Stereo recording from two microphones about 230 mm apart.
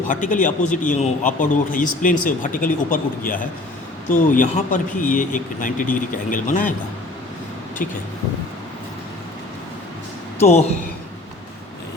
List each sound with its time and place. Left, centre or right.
0.1 s a man's voice: left
10.4 s a woman's voice: left